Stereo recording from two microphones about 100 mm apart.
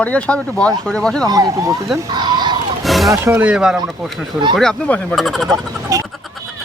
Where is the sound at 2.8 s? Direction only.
Centre (ahead or behind).